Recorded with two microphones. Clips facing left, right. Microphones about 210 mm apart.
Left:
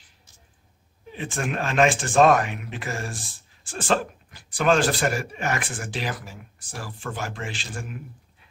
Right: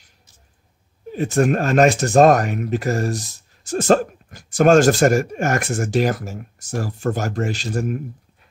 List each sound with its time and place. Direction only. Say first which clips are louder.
1.1 s speech: right 11 dB; 40° right (ahead or behind)